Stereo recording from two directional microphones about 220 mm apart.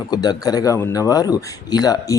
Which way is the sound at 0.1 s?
20° left (ahead or behind).